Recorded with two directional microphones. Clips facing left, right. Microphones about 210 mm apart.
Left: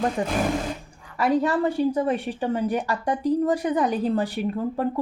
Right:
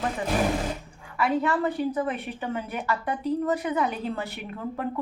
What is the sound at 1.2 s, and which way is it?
A woman's voice, 35° left (ahead or behind).